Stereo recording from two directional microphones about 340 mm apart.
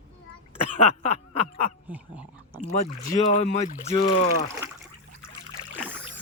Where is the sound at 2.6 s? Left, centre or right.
Left.